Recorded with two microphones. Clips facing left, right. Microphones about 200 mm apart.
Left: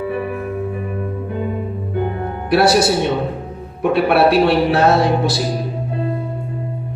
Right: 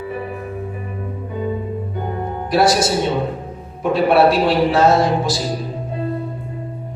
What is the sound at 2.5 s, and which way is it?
Speech, 65° left (ahead or behind).